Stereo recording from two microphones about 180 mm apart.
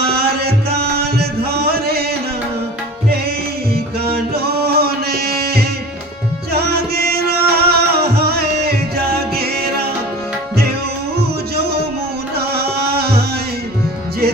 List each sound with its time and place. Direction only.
0.1 s music: 60° right (ahead or behind)
4.0 s music: 60° right (ahead or behind)
12.4 s music: 60° right (ahead or behind)